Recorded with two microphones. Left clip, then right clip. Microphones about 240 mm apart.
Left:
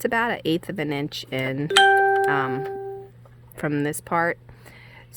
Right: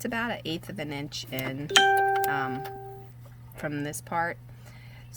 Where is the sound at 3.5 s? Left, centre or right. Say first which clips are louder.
Left 8 dB; left.